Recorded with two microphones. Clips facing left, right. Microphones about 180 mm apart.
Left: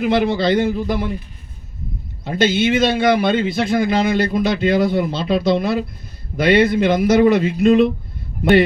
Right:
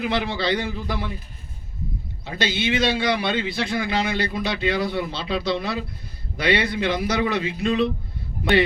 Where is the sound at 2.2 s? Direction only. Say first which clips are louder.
Left 9 dB; 45° left (ahead or behind).